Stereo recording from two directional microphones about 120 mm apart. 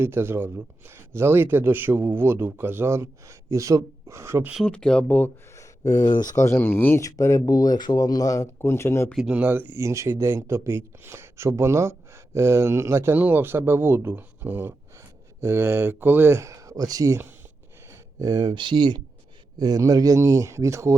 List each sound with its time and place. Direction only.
0.0 s speech: 20° right (ahead or behind)
4.6 s speech: 5° left (ahead or behind)
5.5 s a sound: 30° left (ahead or behind)
6.3 s speech: 25° left (ahead or behind)
9.1 s speech: 10° right (ahead or behind); by 17.2 s 30° right (ahead or behind)
17.8 s a sound: 20° right (ahead or behind)
18.3 s speech: 40° right (ahead or behind)